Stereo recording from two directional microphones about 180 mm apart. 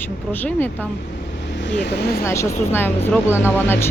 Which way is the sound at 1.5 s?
75° left (ahead or behind).